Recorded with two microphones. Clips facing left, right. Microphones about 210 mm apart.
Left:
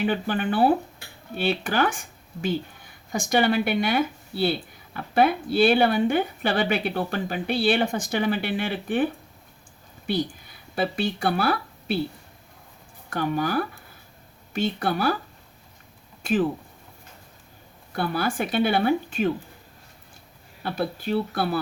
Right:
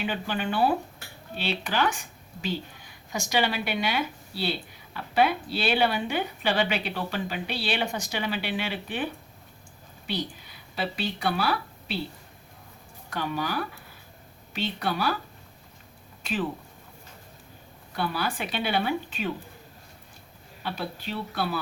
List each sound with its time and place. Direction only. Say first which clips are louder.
0.0 s speech: left 5 dB; 50° left (ahead or behind)
3.1 s speech: left 5 dB; 50° left (ahead or behind)
10.1 s speech: left 6 dB; 50° left (ahead or behind)
13.1 s speech: left 5 dB; 50° left (ahead or behind)
17.9 s speech: left 4 dB; 50° left (ahead or behind)
20.6 s speech: left 6 dB; 45° left (ahead or behind)